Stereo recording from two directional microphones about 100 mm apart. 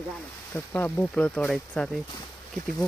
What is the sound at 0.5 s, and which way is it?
Speech, 20° left (ahead or behind).